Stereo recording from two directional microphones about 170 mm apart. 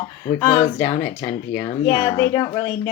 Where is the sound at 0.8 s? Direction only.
35° left (ahead or behind).